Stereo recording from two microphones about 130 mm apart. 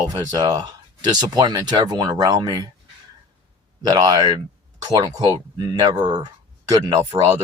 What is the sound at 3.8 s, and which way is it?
Speech, 30° right (ahead or behind).